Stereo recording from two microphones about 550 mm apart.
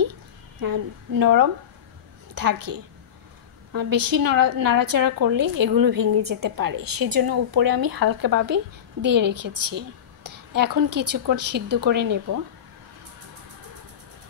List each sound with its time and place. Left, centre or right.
0.0 s a sound: right
2.3 s a woman's voice: right
11.1 s speech: centre
12.0 s a woman's voice: right